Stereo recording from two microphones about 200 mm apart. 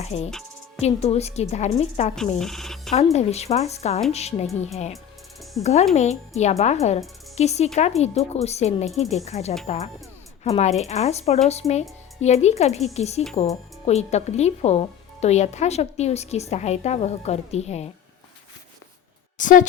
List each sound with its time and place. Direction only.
0.0 s a woman's voice: 30° left (ahead or behind)
2.4 s a sound: centre (ahead or behind)
2.9 s a woman's voice: 35° left (ahead or behind)
19.4 s a woman's voice: 40° left (ahead or behind)